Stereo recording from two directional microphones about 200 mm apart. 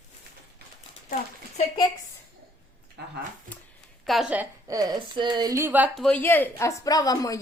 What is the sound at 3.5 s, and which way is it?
Speech, 40° right (ahead or behind).